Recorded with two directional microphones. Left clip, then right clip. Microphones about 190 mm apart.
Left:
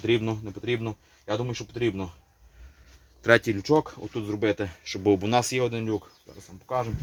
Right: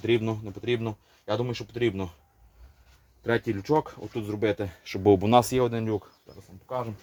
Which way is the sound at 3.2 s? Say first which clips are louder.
Left 7 dB; 35° left (ahead or behind).